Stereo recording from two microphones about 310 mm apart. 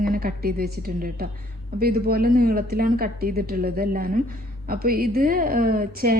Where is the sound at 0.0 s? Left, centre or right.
Right.